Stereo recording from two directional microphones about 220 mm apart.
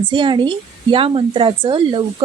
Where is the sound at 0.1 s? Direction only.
20° right (ahead or behind).